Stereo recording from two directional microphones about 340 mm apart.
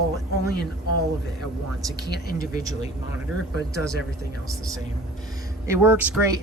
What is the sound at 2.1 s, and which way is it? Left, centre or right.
Speech, left.